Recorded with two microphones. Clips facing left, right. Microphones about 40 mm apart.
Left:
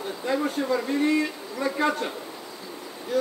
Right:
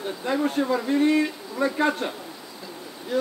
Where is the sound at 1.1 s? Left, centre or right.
Right.